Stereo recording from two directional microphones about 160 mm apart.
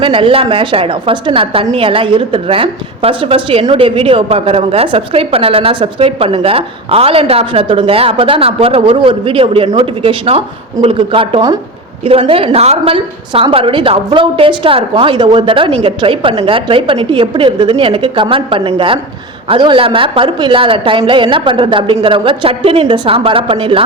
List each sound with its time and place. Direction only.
0.0 s a woman's voice: 35° right (ahead or behind)